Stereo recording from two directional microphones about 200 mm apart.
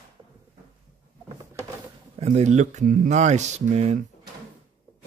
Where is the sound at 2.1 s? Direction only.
30° right (ahead or behind).